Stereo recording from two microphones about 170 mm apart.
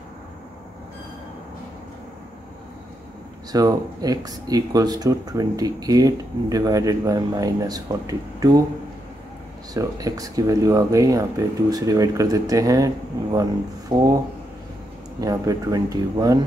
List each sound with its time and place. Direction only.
3.5 s speech: 20° right (ahead or behind)
9.8 s speech: 20° right (ahead or behind)
15.1 s speech: 20° right (ahead or behind)